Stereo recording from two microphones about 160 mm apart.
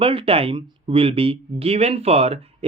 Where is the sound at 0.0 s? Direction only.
35° right (ahead or behind).